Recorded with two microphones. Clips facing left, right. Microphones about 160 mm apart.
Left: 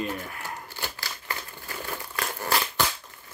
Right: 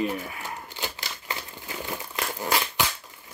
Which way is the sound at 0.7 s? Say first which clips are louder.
Right 1 dB; 20° right (ahead or behind).